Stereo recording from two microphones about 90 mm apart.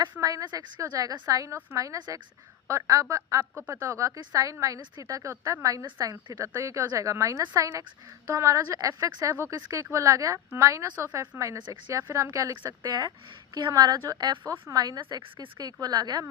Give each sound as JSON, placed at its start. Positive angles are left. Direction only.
{"t": 0.2, "sound": "a woman's voice", "side_deg": -45}
{"t": 6.1, "sound": "a woman's voice", "side_deg": -50}
{"t": 6.4, "sound": "a woman's voice", "side_deg": -35}